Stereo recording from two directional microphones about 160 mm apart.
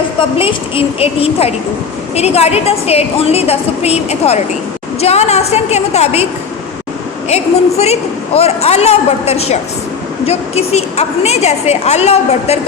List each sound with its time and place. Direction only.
0.2 s a woman's voice: 35° left (ahead or behind)
7.3 s a woman's voice: 40° left (ahead or behind)